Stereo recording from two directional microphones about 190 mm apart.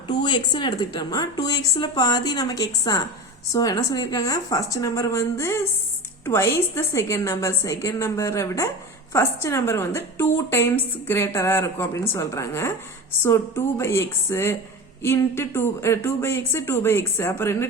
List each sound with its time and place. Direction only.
0.1 s a woman's voice: 25° left (ahead or behind)